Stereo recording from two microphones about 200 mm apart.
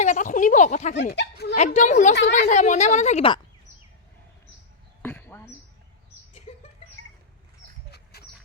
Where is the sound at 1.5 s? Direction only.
35° left (ahead or behind).